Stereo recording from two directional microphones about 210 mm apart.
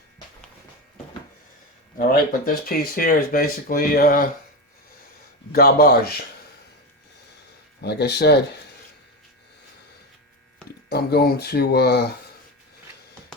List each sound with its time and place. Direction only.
2.0 s speech: 45° left (ahead or behind)
5.5 s speech: 45° left (ahead or behind)
7.8 s speech: 50° left (ahead or behind)
10.8 s speech: 50° left (ahead or behind)